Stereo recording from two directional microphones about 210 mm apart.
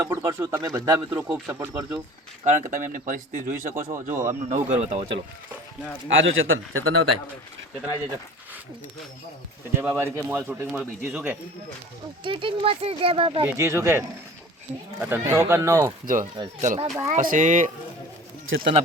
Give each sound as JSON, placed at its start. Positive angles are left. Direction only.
{"t": 0.0, "sound": "speech", "side_deg": -10}
{"t": 2.4, "sound": "speech", "side_deg": -35}
{"t": 6.1, "sound": "a man's voice", "side_deg": -65}
{"t": 9.7, "sound": "speech", "side_deg": -10}
{"t": 12.2, "sound": "speech", "side_deg": -25}
{"t": 13.4, "sound": "speech", "side_deg": -10}
{"t": 16.0, "sound": "speech", "side_deg": -40}
{"t": 18.5, "sound": "a man's voice", "side_deg": -70}